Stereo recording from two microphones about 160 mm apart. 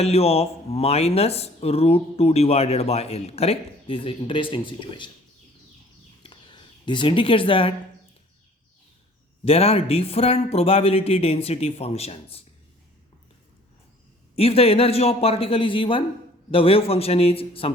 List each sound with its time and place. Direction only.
0.0 s speech: 40° left (ahead or behind)
6.2 s a sound: 30° left (ahead or behind)
9.4 s speech: 40° left (ahead or behind)
14.3 s speech: 40° left (ahead or behind)